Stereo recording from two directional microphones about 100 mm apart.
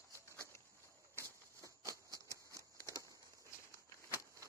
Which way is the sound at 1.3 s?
30° right (ahead or behind).